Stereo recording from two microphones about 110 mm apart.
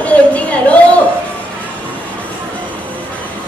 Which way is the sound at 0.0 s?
15° left (ahead or behind).